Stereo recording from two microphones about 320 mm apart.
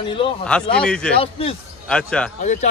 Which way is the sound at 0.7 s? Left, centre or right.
Centre.